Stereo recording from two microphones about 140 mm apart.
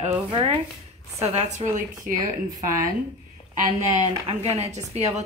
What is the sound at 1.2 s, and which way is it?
Speech, 50° right (ahead or behind).